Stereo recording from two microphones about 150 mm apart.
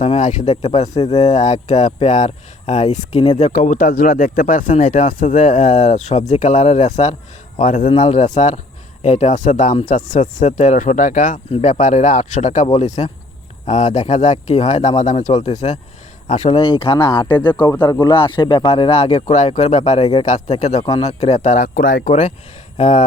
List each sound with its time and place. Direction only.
0.2 s speech: 55° left (ahead or behind)
7.6 s speech: 65° left (ahead or behind)
7.9 s speech: 50° left (ahead or behind)
16.6 s speech: 35° left (ahead or behind); by 22.1 s 70° left (ahead or behind)
22.8 s speech: 55° left (ahead or behind)